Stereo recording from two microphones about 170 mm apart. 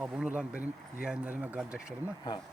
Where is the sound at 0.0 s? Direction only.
10° right (ahead or behind).